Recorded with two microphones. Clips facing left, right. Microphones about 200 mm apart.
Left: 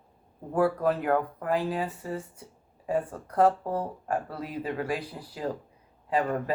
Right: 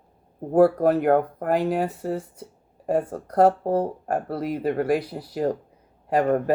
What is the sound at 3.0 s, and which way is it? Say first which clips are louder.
Speech: right 7 dB; 40° right (ahead or behind).